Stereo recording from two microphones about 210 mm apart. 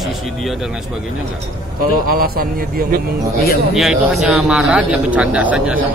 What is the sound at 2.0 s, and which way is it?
Speech, 45° right (ahead or behind).